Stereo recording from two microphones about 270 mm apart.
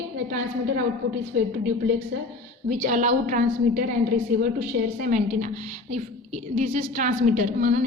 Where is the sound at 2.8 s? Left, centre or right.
Right.